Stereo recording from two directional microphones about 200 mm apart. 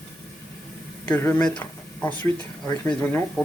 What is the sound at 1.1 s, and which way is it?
Speech, 10° left (ahead or behind).